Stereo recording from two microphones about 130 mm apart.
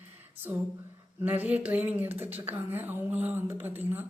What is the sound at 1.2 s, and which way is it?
Speech, 10° right (ahead or behind).